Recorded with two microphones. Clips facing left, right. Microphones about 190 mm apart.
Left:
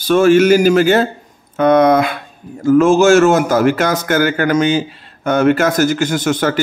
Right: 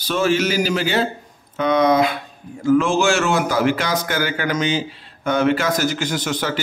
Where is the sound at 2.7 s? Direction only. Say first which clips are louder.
Left 7 dB; 40° left (ahead or behind).